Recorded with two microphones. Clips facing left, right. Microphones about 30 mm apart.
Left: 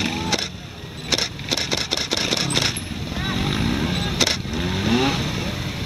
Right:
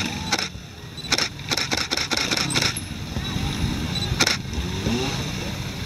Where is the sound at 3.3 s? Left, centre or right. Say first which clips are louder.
Left 5 dB; left.